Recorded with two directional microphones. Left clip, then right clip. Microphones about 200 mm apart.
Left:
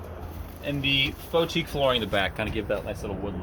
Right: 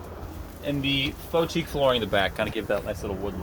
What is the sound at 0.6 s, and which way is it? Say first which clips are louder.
Speech: left 2 dB; 30° right (ahead or behind).